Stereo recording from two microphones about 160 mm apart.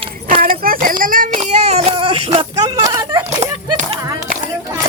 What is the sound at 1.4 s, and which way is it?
Child singing, 45° right (ahead or behind).